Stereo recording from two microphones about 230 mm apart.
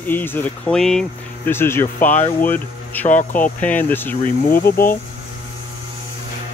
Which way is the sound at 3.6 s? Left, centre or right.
Centre.